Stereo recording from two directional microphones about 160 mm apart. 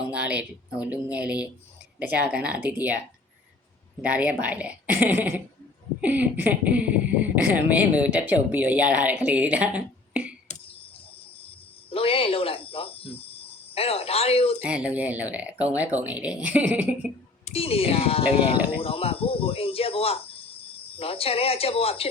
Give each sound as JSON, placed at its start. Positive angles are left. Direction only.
{"t": 0.1, "sound": "speech", "side_deg": -10}
{"t": 4.0, "sound": "speech", "side_deg": -10}
{"t": 11.4, "sound": "cricket", "side_deg": 35}
{"t": 14.6, "sound": "speech", "side_deg": -10}
{"t": 17.4, "sound": "speech", "side_deg": 40}